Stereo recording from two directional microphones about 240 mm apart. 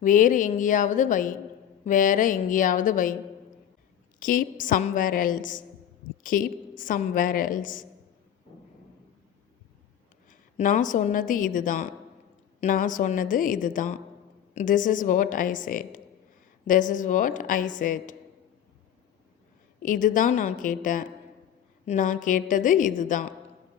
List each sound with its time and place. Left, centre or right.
0.0 s a woman's voice: left
4.2 s a woman's voice: left
10.2 s a woman's voice: left
19.8 s a woman's voice: left